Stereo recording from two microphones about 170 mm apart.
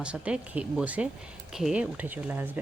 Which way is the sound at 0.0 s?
5° right (ahead or behind).